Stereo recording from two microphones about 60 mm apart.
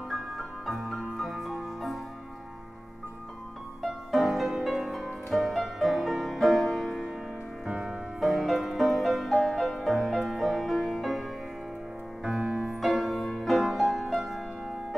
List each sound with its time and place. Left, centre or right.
0.1 s music: centre
3.8 s music: centre
7.6 s music: centre
8.2 s music: centre
12.2 s music: centre
12.8 s music: centre